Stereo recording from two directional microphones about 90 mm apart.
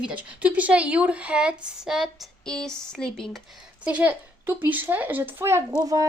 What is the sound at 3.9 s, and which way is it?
Speech, 20° right (ahead or behind).